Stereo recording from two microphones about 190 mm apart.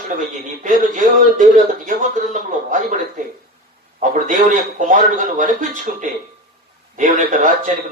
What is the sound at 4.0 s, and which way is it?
A man's voice, 40° right (ahead or behind).